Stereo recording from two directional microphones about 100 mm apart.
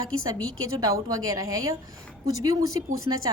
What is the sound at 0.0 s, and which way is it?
A woman's voice, 35° right (ahead or behind).